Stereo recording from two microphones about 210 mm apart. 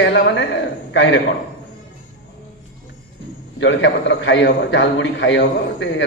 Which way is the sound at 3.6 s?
60° left (ahead or behind).